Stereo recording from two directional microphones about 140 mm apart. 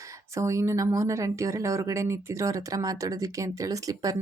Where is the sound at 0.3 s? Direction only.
20° right (ahead or behind).